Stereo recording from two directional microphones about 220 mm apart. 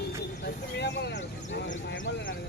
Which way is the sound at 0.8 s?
50° left (ahead or behind).